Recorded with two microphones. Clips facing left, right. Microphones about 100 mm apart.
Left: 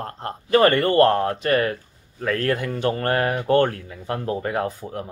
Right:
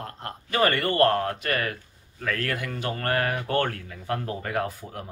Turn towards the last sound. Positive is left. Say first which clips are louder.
# left 4 dB
turn(degrees=25)  # may be behind; listen again after turning